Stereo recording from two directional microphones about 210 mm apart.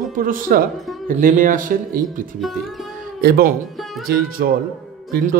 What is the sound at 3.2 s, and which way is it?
Speech, 45° right (ahead or behind).